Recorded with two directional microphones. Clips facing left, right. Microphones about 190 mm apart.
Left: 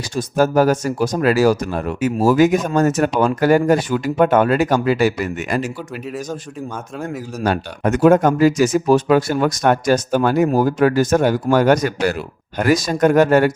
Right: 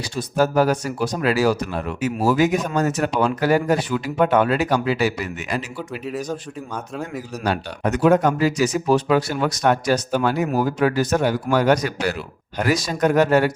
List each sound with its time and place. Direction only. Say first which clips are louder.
0.2 s speech: left 3 dB; 45° left (ahead or behind)
7.4 s speech: left 4 dB; 50° left (ahead or behind)